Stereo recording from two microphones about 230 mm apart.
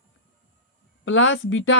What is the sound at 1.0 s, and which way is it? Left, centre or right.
Speech, left.